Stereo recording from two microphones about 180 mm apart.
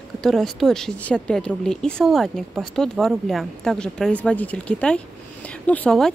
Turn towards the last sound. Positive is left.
turn(degrees=5)  # may be behind; listen again after turning